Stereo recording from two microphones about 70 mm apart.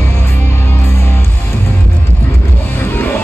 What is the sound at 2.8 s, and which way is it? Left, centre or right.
Music, left.